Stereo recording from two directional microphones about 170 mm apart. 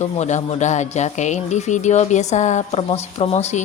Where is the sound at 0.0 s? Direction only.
45° left (ahead or behind).